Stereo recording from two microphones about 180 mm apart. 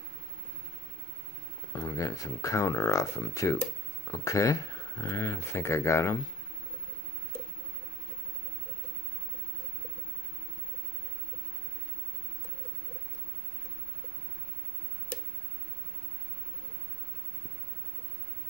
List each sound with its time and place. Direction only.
1.8 s speech: 20° left (ahead or behind)